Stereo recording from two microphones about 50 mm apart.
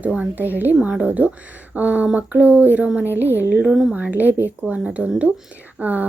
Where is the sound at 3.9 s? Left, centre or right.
Right.